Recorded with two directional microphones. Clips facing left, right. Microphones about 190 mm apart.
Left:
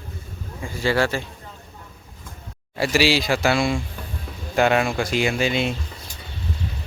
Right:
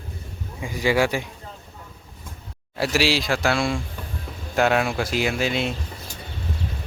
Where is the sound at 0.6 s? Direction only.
15° right (ahead or behind).